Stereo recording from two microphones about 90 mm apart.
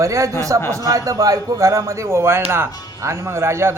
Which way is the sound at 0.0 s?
35° right (ahead or behind).